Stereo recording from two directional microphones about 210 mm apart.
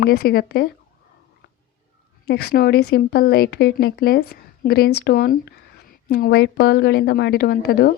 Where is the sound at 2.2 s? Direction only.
50° left (ahead or behind).